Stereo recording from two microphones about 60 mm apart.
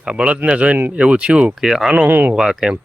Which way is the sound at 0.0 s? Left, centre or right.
Centre.